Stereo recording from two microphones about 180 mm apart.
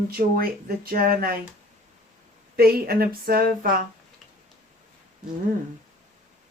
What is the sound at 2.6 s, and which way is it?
A woman's voice, 55° right (ahead or behind).